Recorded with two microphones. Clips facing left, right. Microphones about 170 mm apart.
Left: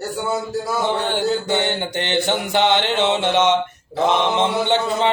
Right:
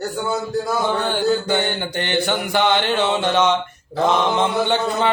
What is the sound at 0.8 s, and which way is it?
Mantra, 20° left (ahead or behind).